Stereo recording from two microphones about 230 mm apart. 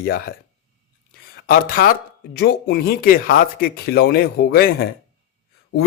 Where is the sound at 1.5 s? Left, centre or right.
Left.